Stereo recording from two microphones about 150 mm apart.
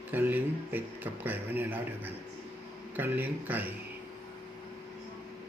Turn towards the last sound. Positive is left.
turn(degrees=-10)  # may be behind; listen again after turning